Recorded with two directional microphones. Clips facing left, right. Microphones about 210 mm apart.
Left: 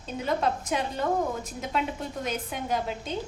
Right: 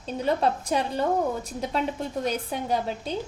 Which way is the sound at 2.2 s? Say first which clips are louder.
Right 3 dB; 35° right (ahead or behind).